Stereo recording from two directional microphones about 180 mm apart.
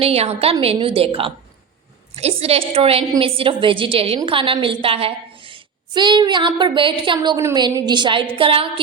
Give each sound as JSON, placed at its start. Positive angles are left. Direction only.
{"t": 0.0, "sound": "a woman's voice", "side_deg": -35}